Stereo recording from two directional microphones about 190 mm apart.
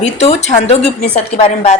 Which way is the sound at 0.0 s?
35° left (ahead or behind).